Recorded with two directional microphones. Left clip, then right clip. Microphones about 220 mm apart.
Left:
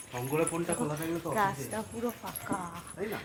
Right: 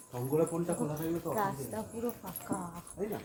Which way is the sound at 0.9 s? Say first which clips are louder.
Left 3 dB; 30° left (ahead or behind).